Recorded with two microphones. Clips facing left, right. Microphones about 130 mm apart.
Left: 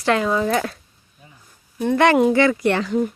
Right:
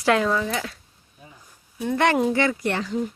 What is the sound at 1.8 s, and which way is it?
Speech, 80° left.